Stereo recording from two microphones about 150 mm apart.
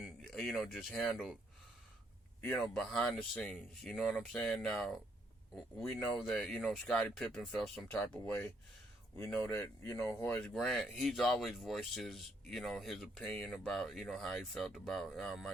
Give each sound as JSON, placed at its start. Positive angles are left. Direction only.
{"t": 0.0, "sound": "speech", "side_deg": 0}
{"t": 2.4, "sound": "speech", "side_deg": 15}
{"t": 2.7, "sound": "speech", "side_deg": 5}
{"t": 10.5, "sound": "speech", "side_deg": 0}